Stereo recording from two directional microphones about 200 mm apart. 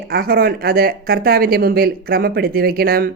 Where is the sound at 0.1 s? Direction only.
50° right (ahead or behind).